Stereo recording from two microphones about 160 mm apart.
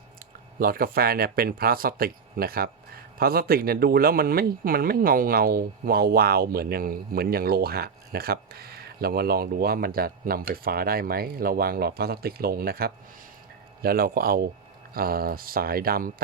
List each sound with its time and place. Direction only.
0.6 s speech: 65° right (ahead or behind)